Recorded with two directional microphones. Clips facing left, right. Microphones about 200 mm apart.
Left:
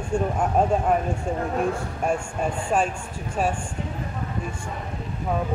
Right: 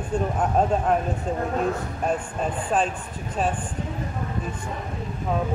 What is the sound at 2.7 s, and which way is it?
Speech, 10° left (ahead or behind).